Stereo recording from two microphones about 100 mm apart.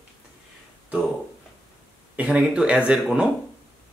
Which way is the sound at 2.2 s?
10° right (ahead or behind).